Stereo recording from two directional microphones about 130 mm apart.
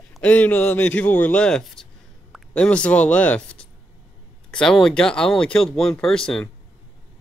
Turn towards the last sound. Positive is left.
turn(degrees=5)  # may be behind; listen again after turning